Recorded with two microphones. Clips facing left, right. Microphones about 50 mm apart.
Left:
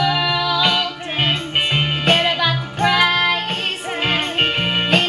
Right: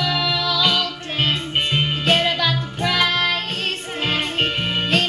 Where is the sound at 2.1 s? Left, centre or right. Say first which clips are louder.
Left 1 dB; left.